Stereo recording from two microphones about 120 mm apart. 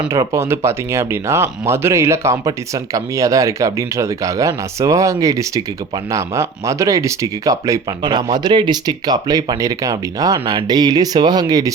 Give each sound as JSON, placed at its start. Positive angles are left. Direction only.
{"t": 0.1, "sound": "speech", "side_deg": -25}